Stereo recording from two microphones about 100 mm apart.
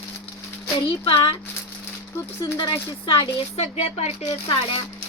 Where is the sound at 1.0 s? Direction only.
65° left (ahead or behind).